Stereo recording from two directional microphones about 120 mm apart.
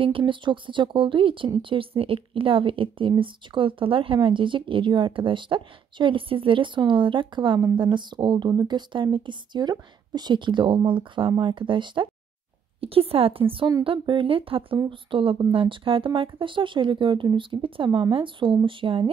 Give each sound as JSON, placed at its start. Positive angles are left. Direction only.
{"t": 0.0, "sound": "speech", "side_deg": -45}
{"t": 12.8, "sound": "speech", "side_deg": -50}